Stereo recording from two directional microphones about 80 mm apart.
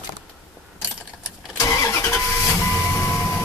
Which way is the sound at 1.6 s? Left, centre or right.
Left.